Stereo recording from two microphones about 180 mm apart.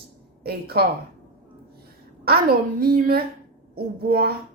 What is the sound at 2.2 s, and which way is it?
A woman's voice, 55° right (ahead or behind).